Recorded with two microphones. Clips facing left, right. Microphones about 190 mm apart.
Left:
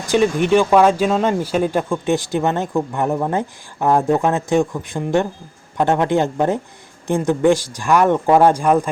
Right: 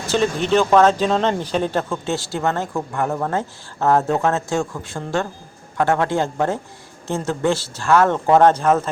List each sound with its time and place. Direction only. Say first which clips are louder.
0.1 s speech: left 3 dB; 15° left (ahead or behind)